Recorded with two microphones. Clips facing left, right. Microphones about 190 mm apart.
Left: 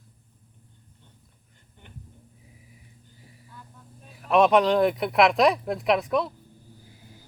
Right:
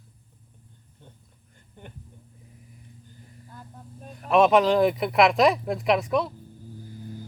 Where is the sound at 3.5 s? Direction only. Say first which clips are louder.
Right 4 dB; 45° right (ahead or behind).